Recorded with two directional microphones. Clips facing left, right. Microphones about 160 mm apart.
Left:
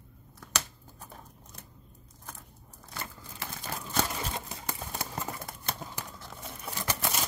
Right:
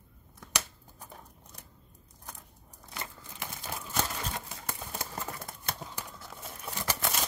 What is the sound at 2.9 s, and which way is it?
Crumpling, 15° right (ahead or behind).